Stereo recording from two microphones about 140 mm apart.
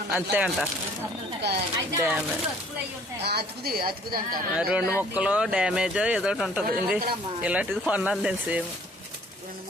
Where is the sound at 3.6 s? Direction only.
90° right.